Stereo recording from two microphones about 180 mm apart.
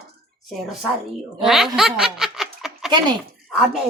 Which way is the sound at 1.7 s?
5° right (ahead or behind).